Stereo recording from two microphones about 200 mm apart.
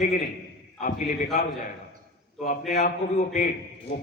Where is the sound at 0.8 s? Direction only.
40° left (ahead or behind).